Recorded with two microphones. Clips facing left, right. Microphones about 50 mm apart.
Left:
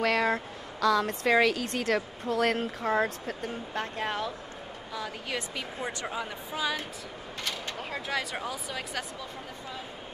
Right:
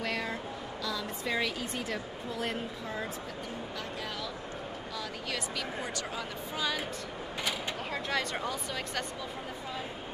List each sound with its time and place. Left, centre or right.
0.0 s speech: left
4.9 s speech: centre
7.9 s speech: centre